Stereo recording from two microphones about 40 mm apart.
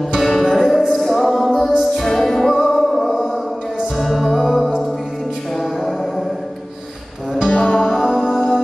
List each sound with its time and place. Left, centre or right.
0.4 s music: centre
1.0 s music: centre
7.4 s music: left
8.1 s music: centre